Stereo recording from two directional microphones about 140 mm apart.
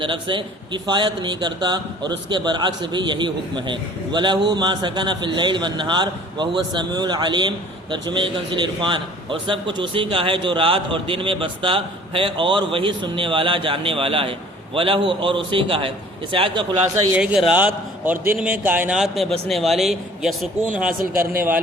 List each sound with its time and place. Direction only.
0.0 s a man's voice: 35° right (ahead or behind)
17.5 s a man's voice: 10° right (ahead or behind)
18.9 s speech: centre (ahead or behind)
21.2 s a man's voice: 15° right (ahead or behind)